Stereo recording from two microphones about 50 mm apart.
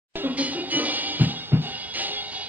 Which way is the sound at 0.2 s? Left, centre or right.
Right.